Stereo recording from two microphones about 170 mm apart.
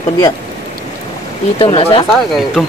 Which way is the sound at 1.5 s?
30° left (ahead or behind).